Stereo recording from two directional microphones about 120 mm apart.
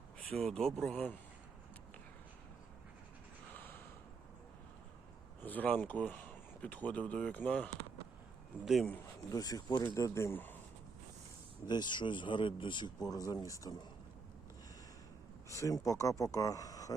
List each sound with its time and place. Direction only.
0.3 s speech: 5° left (ahead or behind)
3.5 s gasp: 15° left (ahead or behind)
5.4 s speech: 15° left (ahead or behind)
8.6 s speech: centre (ahead or behind)
9.3 s speech: 35° left (ahead or behind); by 10.6 s 15° left (ahead or behind)
11.6 s speech: 35° left (ahead or behind)
15.5 s speech: 25° left (ahead or behind)